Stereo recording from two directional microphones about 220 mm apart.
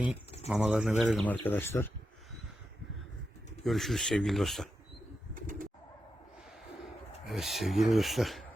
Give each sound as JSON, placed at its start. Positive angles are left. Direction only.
{"t": 0.4, "sound": "speech", "side_deg": -5}
{"t": 3.6, "sound": "speech", "side_deg": 0}
{"t": 5.3, "sound": "bird", "side_deg": -40}
{"t": 7.3, "sound": "speech", "side_deg": 0}